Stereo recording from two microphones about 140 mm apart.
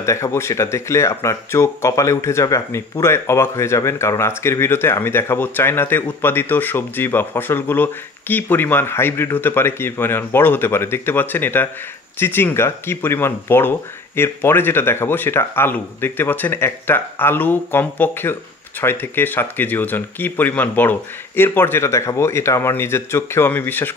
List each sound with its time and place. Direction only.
0.0 s speech: 20° left (ahead or behind)